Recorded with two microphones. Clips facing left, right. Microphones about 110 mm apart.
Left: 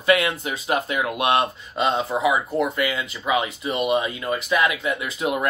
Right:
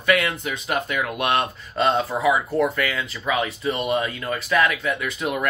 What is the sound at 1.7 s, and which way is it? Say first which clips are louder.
Speech: right 2 dB; 15° left (ahead or behind).